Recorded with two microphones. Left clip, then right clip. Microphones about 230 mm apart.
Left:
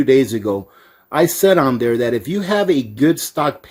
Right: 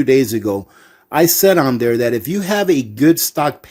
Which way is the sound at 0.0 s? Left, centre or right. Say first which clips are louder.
Even; right.